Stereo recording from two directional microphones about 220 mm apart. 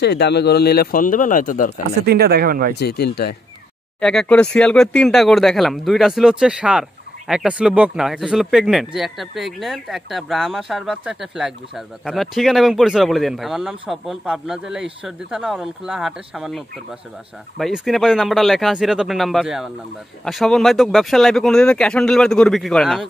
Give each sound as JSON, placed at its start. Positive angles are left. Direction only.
{"t": 0.0, "sound": "speech", "side_deg": 50}
{"t": 2.0, "sound": "speech", "side_deg": -45}
{"t": 2.7, "sound": "speech", "side_deg": 50}
{"t": 4.0, "sound": "speech", "side_deg": 5}